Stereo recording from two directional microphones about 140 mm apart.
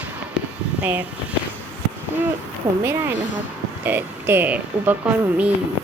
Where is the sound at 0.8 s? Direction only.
10° right (ahead or behind).